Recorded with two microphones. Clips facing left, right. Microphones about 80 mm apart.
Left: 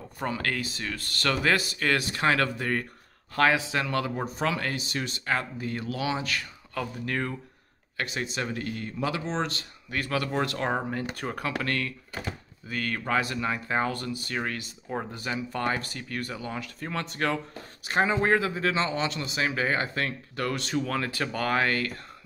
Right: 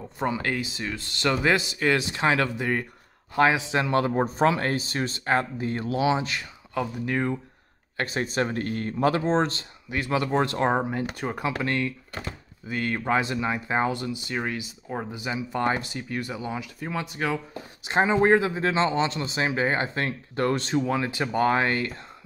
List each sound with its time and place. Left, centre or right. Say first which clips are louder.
0.2 s speech: right 3 dB; centre
8.0 s speech: right 5 dB; right
9.8 s speech: right 4 dB; right
17.8 s speech: right 4 dB; right
20.8 s speech: right 3 dB; centre